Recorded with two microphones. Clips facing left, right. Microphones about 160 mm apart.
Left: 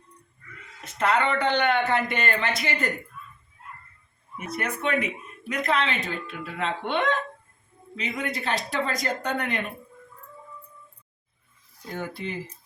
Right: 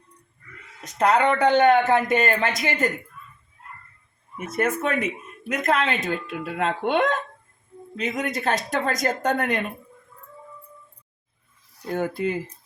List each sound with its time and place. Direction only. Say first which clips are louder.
0.9 s speech: right 4 dB; 40° right (ahead or behind)
4.4 s speech: right 6 dB; 50° right (ahead or behind)
11.8 s speech: right 8 dB; 55° right (ahead or behind)